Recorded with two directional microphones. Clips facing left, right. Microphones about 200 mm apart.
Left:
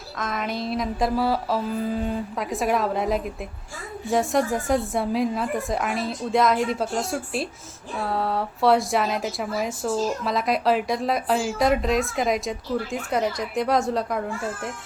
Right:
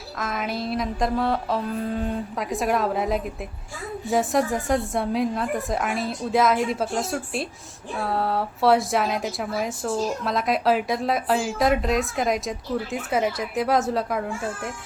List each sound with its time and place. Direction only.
0.2 s a woman's voice: centre (ahead or behind)